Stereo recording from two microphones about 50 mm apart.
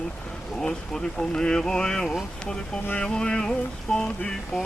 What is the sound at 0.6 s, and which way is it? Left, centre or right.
Speech, centre.